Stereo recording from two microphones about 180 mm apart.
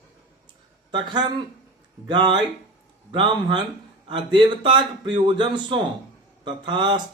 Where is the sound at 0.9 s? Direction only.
25° right (ahead or behind).